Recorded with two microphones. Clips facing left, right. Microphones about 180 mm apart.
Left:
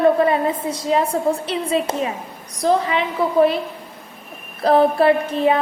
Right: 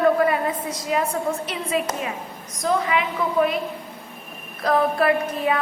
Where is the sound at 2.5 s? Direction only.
30° left (ahead or behind).